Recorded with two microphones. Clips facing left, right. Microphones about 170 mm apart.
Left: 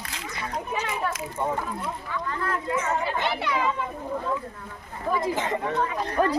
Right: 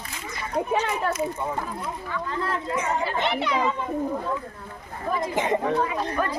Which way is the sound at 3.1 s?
20° right (ahead or behind).